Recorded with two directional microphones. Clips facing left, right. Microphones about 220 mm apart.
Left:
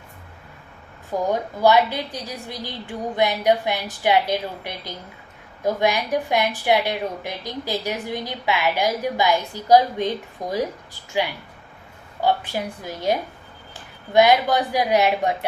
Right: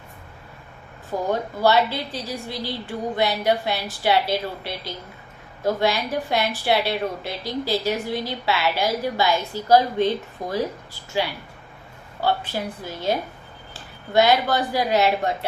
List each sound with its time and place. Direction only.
1.3 s a woman's voice: 15° left (ahead or behind)
12.2 s a woman's voice: 15° left (ahead or behind)